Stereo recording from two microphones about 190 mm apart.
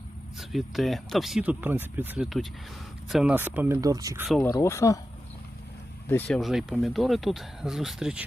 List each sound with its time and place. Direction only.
0.3 s speech: centre (ahead or behind); by 4.3 s 15° right (ahead or behind)
4.3 s speech: 5° left (ahead or behind)
4.5 s speech: 15° left (ahead or behind)
6.1 s speech: 5° left (ahead or behind)